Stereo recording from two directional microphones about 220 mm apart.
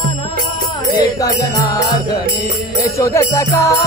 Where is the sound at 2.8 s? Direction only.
15° left (ahead or behind).